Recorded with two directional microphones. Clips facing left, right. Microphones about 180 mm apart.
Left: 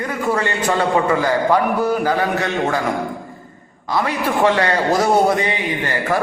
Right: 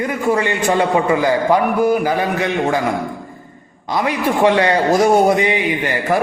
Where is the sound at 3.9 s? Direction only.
20° right (ahead or behind).